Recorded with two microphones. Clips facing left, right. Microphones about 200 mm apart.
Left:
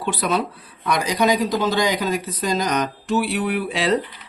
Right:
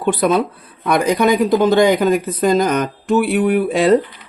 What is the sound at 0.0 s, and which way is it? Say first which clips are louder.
Speech: right 7 dB; 50° right (ahead or behind).